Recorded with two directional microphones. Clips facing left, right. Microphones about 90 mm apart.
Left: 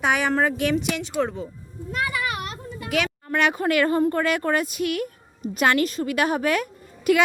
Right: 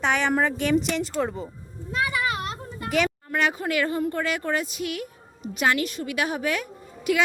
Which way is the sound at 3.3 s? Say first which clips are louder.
Left 3 dB; 65° left (ahead or behind).